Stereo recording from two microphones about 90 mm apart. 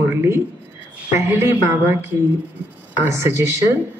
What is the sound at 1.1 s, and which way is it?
A woman's voice, 30° right (ahead or behind).